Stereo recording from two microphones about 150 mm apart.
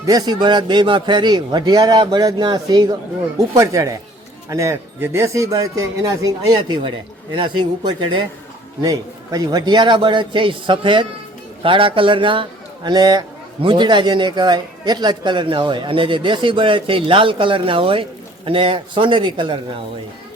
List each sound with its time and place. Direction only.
0.0 s a man's voice: 25° right (ahead or behind)